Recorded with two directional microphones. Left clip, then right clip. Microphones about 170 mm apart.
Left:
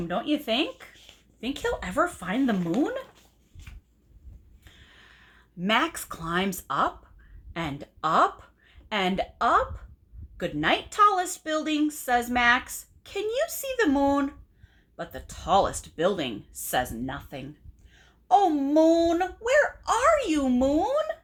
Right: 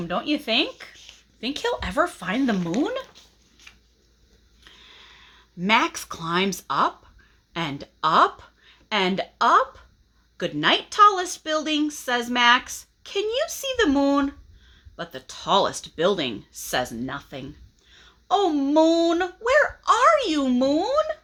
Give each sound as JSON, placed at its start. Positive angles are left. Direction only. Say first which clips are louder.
{"t": 0.0, "sound": "speech", "louder": "right 2 dB", "side_deg": -20}
{"t": 4.6, "sound": "a sound", "louder": "right 6 dB", "side_deg": -30}
{"t": 7.5, "sound": "a woman's voice", "louder": "right 4 dB", "side_deg": -35}